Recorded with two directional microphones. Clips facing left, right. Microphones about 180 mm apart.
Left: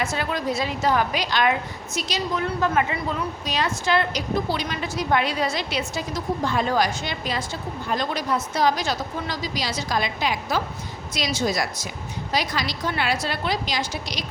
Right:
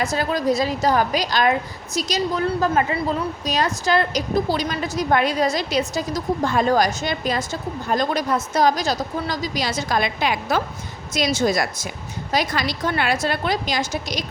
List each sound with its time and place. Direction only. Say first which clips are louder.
0.0 s speech: right 4 dB; 40° right (ahead or behind); by 10.6 s 60° right (ahead or behind)
11.1 s a woman's voice: right 5 dB; 50° right (ahead or behind)